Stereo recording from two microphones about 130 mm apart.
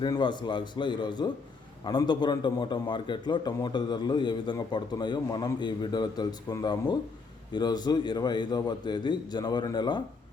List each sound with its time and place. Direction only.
0.0 s a man's voice: 35° left (ahead or behind)